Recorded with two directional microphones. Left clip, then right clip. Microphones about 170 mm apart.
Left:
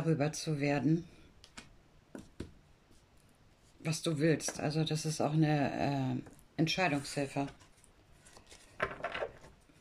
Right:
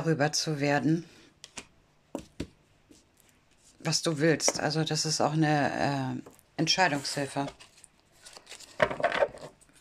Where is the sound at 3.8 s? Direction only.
20° left (ahead or behind).